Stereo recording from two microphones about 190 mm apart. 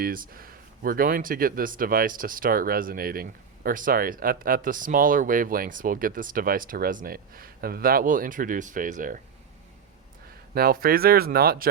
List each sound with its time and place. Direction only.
0.0 s speech: 50° right (ahead or behind)
10.5 s speech: 50° right (ahead or behind)